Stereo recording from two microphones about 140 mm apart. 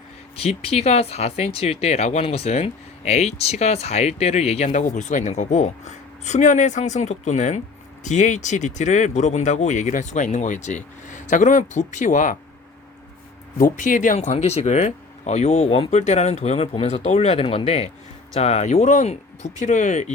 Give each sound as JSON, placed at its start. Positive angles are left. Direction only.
{"t": 0.3, "sound": "speech", "side_deg": 45}
{"t": 13.6, "sound": "speech", "side_deg": 75}